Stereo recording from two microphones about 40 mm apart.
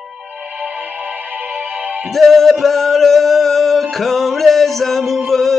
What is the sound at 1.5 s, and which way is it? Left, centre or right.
Music, right.